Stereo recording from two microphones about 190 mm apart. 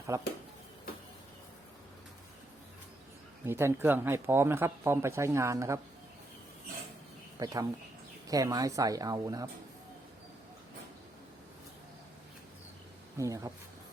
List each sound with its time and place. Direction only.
0.1 s speech: 15° right (ahead or behind)
3.4 s speech: 15° right (ahead or behind)
7.3 s speech: 20° right (ahead or behind)
13.1 s speech: 15° right (ahead or behind)